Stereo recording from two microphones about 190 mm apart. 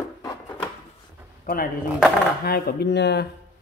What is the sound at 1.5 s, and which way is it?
Speech, 55° left (ahead or behind).